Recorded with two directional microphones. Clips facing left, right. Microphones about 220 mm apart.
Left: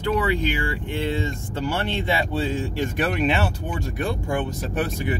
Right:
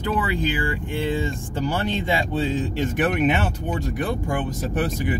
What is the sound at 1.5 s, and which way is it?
Speech, 15° right (ahead or behind).